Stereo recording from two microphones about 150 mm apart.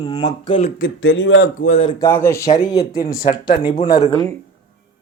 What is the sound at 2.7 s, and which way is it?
Speech, 75° left (ahead or behind).